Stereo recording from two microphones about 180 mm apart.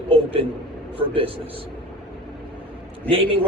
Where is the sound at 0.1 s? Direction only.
30° right (ahead or behind).